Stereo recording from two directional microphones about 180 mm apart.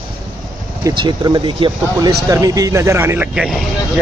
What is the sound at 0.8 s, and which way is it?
Speech, 25° right (ahead or behind).